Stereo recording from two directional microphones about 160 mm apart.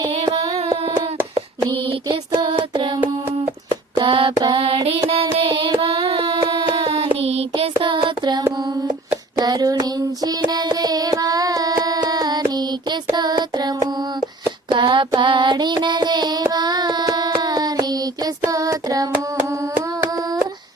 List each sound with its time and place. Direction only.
0.1 s child singing: 35° right (ahead or behind)
1.9 s child singing: 30° right (ahead or behind)
19.5 s singing: 15° right (ahead or behind)